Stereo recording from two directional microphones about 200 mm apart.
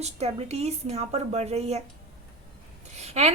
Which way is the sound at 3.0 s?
35° right (ahead or behind).